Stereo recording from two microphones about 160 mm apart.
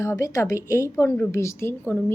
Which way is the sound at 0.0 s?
20° left (ahead or behind).